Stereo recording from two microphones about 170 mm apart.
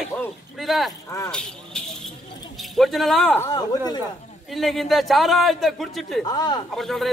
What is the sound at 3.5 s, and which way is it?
Speech, 25° left (ahead or behind).